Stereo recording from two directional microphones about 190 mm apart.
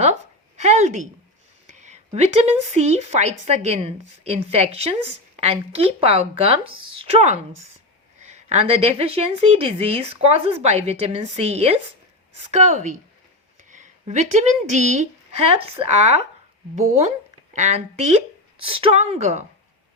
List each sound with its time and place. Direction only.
0.6 s a woman's voice: 35° right (ahead or behind)